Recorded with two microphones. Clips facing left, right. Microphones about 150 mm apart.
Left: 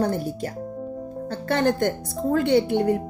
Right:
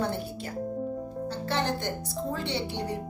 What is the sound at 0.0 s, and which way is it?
Music, 40° left (ahead or behind).